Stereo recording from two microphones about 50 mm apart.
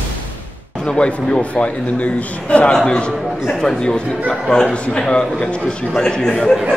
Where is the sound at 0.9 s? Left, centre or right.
Left.